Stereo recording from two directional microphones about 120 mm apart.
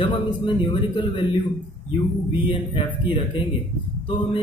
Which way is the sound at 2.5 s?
45° left (ahead or behind).